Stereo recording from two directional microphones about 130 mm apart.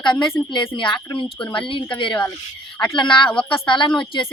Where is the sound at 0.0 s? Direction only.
35° left (ahead or behind).